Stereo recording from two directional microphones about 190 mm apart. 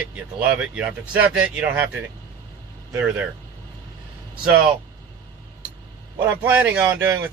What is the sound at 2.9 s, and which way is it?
Speech, 10° right (ahead or behind).